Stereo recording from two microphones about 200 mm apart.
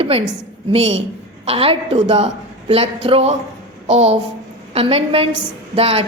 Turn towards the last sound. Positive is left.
turn(degrees=-30)  # may be behind; listen again after turning